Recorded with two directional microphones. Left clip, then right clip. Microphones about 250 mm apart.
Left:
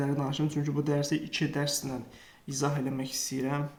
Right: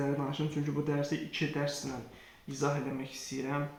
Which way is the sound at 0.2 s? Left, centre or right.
Left.